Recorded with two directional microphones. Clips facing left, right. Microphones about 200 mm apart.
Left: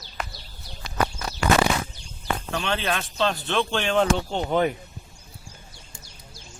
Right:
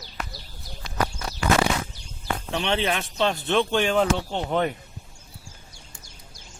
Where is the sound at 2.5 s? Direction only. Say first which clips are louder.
Right 3 dB; 20° right (ahead or behind); by 4.7 s centre (ahead or behind).